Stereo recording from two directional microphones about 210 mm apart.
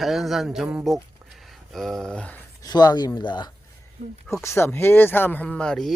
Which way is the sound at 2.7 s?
20° left (ahead or behind).